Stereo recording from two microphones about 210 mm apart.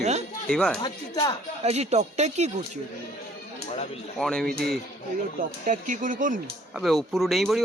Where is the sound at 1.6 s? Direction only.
30° right (ahead or behind).